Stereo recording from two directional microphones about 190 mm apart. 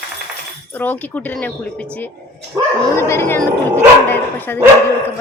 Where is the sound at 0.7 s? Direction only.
10° left (ahead or behind).